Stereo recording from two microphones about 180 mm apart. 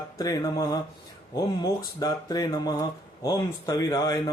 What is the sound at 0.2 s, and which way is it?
Speech, 20° left (ahead or behind).